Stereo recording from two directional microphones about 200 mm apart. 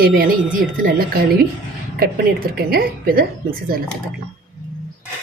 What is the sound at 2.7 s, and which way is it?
Speech, 50° right (ahead or behind).